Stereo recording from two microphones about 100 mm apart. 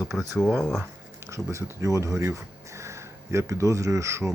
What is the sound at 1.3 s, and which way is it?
Speech, 30° right (ahead or behind).